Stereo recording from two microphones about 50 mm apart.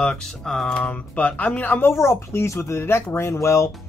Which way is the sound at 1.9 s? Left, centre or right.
Left.